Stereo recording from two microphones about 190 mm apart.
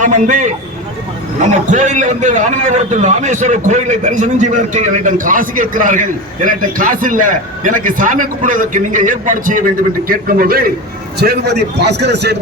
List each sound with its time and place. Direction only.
0.0 s a man's voice: 40° right (ahead or behind); by 12.4 s 65° right (ahead or behind)